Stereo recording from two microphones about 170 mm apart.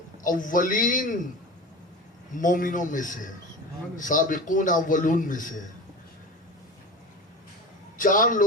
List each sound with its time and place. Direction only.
0.2 s a man's voice: 50° left (ahead or behind)
2.3 s a man's voice: 50° left (ahead or behind)
7.9 s a man's voice: 50° left (ahead or behind)